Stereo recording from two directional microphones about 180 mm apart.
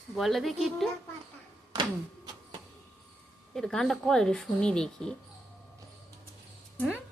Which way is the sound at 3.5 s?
Centre (ahead or behind).